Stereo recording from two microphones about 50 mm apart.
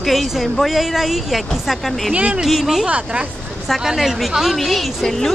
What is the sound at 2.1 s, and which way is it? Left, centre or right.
Speech, right.